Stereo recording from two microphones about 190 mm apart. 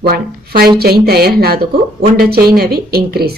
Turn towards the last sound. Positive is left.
turn(degrees=-55)  # may be behind; listen again after turning